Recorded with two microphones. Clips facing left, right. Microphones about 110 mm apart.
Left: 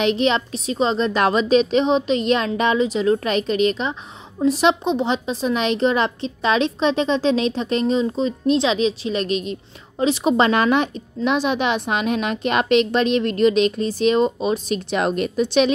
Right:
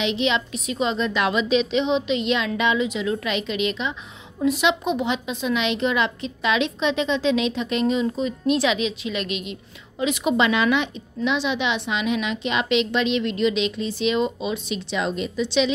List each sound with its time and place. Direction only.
0.0 s a woman's voice: 45° left (ahead or behind)